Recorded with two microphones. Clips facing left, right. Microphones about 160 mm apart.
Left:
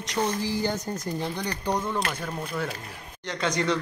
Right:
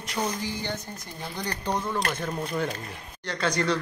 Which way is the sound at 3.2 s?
20° left (ahead or behind).